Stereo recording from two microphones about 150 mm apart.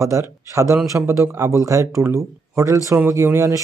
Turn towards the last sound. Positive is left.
turn(degrees=-20)  # may be behind; listen again after turning